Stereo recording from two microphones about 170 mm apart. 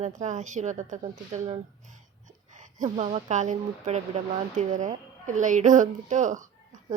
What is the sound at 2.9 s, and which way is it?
Speech, 40° right (ahead or behind).